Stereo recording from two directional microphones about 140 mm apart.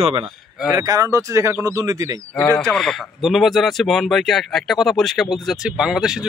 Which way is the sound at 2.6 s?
5° left (ahead or behind).